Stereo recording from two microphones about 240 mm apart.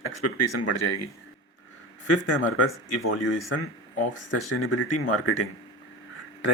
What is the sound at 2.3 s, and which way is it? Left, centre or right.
Speech, left.